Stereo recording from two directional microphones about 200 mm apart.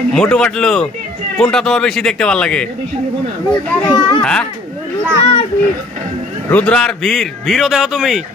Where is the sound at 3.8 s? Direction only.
20° left (ahead or behind).